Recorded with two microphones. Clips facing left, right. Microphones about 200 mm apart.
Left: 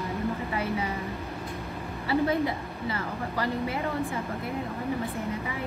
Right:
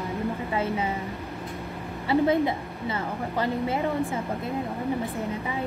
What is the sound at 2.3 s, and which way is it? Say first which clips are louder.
A woman's voice: right 4 dB; 25° right (ahead or behind).